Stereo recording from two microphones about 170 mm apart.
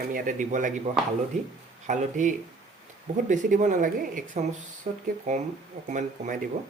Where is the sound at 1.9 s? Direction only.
45° right (ahead or behind).